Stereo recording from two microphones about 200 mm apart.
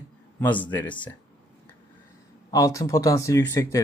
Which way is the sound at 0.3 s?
10° left (ahead or behind).